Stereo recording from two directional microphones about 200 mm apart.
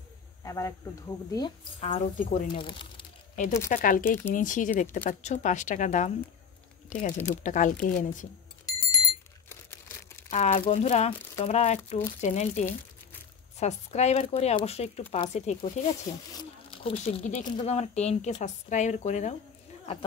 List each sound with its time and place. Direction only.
0.4 s speech: 15° left (ahead or behind)
2.1 s speech: 40° left (ahead or behind)
2.6 s crumpling: 25° left (ahead or behind)
3.6 s speech: 40° left (ahead or behind)
8.6 s alarm clock: 20° left (ahead or behind)
10.3 s speech: 35° left (ahead or behind)